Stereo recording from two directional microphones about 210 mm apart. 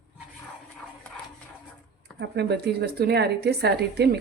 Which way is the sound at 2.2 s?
55° right (ahead or behind).